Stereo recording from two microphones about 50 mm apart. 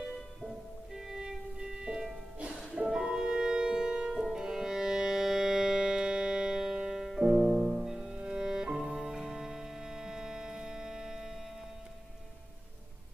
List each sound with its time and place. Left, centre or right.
0.9 s music: centre
7.3 s music: right